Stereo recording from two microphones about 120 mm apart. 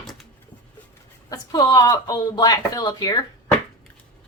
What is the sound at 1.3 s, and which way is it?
Speech, 35° left (ahead or behind).